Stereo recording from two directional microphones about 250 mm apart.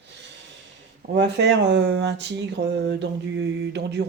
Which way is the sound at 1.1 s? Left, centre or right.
Right.